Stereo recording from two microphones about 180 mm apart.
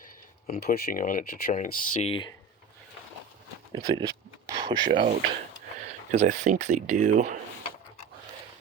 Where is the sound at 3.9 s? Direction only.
20° right (ahead or behind).